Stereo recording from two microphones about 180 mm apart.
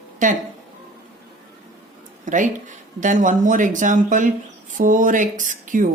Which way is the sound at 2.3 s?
45° right (ahead or behind).